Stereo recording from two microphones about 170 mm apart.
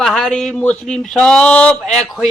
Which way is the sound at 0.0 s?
5° left (ahead or behind).